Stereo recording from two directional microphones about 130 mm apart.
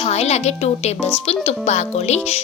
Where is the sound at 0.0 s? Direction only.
55° left (ahead or behind).